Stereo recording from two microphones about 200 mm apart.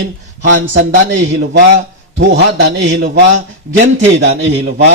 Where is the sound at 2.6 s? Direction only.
70° right (ahead or behind).